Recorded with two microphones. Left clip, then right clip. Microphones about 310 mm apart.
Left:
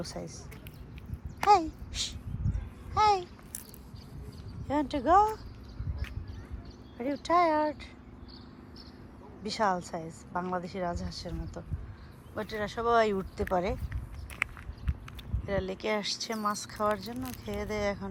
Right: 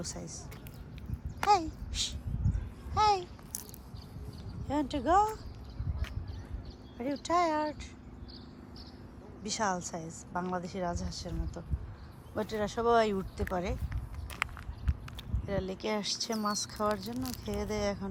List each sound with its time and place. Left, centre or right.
0.0 s a woman's voice: centre
1.4 s a sound: centre
4.7 s a woman's voice: centre
7.0 s a woman's voice: centre
9.4 s a woman's voice: centre
15.4 s a woman's voice: centre